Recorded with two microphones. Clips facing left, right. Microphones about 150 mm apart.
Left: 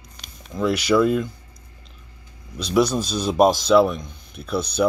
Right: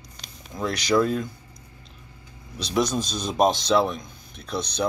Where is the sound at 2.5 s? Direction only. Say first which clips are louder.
Left 5 dB; 5° left (ahead or behind).